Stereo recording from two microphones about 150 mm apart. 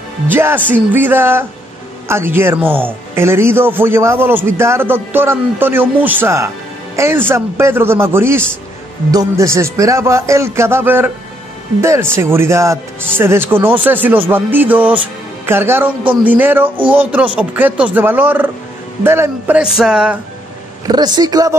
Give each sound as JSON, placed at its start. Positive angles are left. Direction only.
{"t": 0.3, "sound": "speech", "side_deg": -15}
{"t": 20.8, "sound": "speech", "side_deg": -25}